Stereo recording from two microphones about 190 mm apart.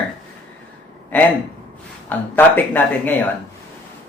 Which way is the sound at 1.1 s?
10° left (ahead or behind).